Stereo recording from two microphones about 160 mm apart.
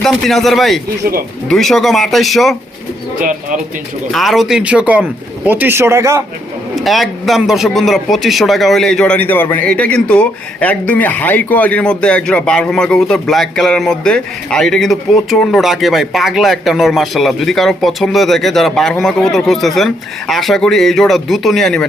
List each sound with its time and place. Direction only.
0.0 s a man's voice: centre (ahead or behind)
3.2 s speech: 55° right (ahead or behind)
4.1 s a man's voice: centre (ahead or behind); by 6.2 s 20° right (ahead or behind)
6.7 s a man's voice: centre (ahead or behind)